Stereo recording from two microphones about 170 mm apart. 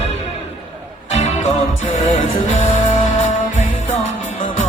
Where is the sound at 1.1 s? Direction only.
40° left (ahead or behind).